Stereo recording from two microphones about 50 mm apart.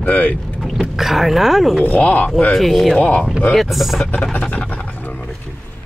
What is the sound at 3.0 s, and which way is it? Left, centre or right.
Speech, left.